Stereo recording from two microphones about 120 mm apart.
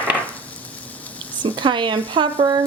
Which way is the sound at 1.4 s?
40° right (ahead or behind).